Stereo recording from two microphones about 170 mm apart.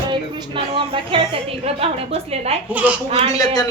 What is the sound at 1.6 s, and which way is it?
Speech, 35° right (ahead or behind).